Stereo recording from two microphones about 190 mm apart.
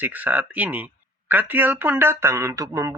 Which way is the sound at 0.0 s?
10° right (ahead or behind).